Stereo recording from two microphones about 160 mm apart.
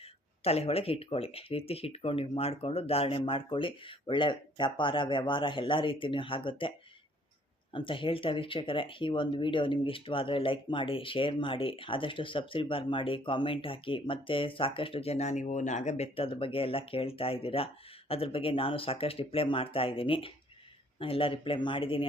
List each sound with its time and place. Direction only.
0.0 s speech: 40° left (ahead or behind)